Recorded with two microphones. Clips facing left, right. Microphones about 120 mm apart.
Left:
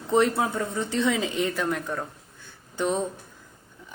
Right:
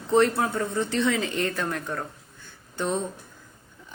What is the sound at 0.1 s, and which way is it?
Speech, 15° left (ahead or behind).